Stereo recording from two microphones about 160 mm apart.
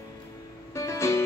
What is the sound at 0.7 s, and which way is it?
Music, 15° left (ahead or behind).